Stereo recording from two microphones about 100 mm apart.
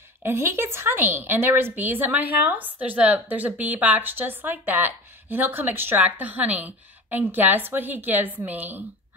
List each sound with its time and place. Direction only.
0.2 s speech: 25° right (ahead or behind)